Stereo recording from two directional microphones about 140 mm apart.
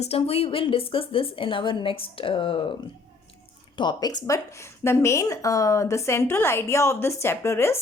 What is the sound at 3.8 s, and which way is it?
A woman's voice, 30° left (ahead or behind).